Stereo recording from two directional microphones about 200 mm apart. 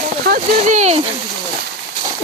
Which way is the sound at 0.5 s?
35° right (ahead or behind).